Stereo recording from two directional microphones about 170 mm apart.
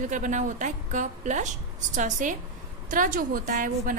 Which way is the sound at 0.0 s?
50° right (ahead or behind).